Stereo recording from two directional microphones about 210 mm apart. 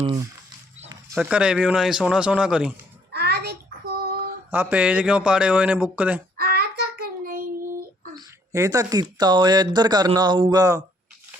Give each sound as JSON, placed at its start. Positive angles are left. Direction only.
{"t": 0.0, "sound": "speech", "side_deg": -20}
{"t": 1.1, "sound": "a man's voice", "side_deg": -5}
{"t": 3.1, "sound": "a sound", "side_deg": -50}
{"t": 4.5, "sound": "a man's voice", "side_deg": -10}
{"t": 6.3, "sound": "child singing", "side_deg": -50}
{"t": 8.1, "sound": "speech", "side_deg": -15}